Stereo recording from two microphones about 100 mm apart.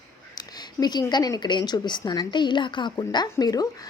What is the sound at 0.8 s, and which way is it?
Speech, 45° left (ahead or behind).